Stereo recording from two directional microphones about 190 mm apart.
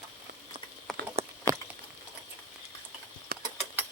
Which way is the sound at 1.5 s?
20° right (ahead or behind).